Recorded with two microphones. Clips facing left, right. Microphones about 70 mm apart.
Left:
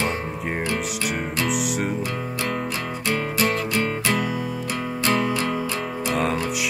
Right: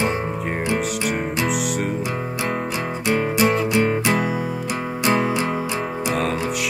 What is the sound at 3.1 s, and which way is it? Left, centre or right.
Music, centre.